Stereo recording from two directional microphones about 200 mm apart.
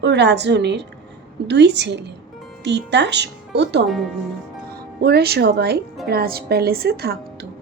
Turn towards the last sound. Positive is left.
turn(degrees=-50)  # may be behind; listen again after turning